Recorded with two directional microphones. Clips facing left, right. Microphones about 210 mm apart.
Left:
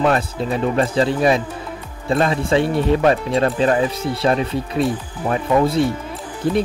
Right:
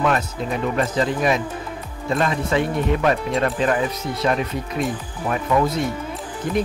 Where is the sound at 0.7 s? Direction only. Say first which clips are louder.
Left 3 dB; 30° left (ahead or behind).